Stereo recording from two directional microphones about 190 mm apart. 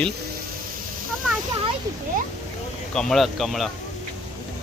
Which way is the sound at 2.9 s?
Centre (ahead or behind).